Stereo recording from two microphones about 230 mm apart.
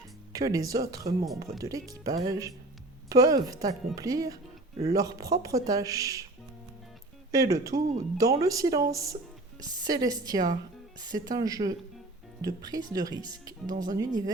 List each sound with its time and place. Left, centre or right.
0.3 s speech: centre
7.3 s speech: centre